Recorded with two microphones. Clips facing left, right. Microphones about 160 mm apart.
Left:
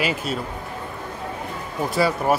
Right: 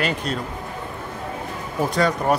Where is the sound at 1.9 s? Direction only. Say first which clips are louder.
Left 1 dB; 5° left (ahead or behind).